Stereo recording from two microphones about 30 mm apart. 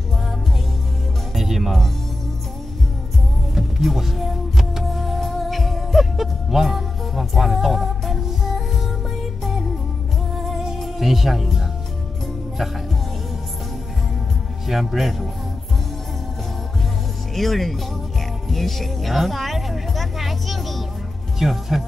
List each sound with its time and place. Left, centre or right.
1.3 s music: centre
3.5 s music: centre
9.4 s music: centre
10.8 s music: centre
14.7 s speech: centre
17.3 s speech: centre
18.5 s music: centre
21.4 s speech: centre